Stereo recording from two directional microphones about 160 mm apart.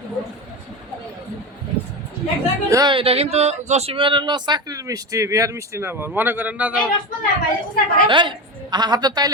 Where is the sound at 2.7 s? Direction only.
30° right (ahead or behind); by 6.7 s 10° right (ahead or behind).